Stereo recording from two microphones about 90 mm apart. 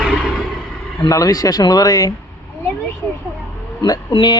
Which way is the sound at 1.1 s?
40° left (ahead or behind).